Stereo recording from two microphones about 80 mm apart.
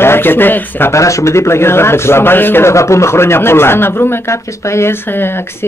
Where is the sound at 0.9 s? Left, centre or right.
Left.